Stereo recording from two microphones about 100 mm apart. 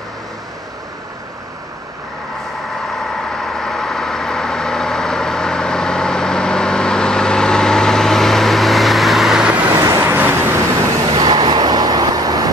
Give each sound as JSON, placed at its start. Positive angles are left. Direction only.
{"t": 3.3, "sound": "vehicle", "side_deg": 5}
{"t": 9.8, "sound": "vehicle", "side_deg": -35}
{"t": 10.0, "sound": "vehicle", "side_deg": -20}
{"t": 11.1, "sound": "vehicle", "side_deg": -60}
{"t": 11.3, "sound": "vehicle", "side_deg": -45}